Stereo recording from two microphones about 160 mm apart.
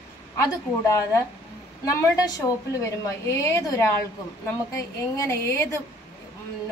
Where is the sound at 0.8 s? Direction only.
20° left (ahead or behind).